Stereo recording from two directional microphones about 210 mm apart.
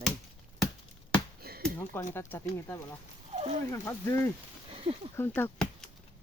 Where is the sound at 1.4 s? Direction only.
45° right (ahead or behind).